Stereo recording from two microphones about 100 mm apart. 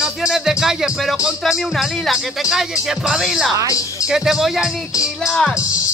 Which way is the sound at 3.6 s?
35° left (ahead or behind).